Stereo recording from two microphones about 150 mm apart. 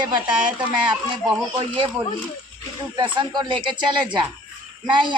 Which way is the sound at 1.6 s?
35° right (ahead or behind).